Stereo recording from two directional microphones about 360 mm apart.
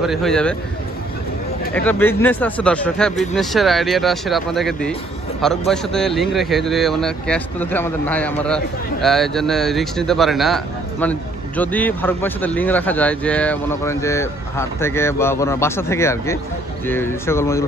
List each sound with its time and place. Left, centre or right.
0.0 s speech: centre
1.7 s speech: centre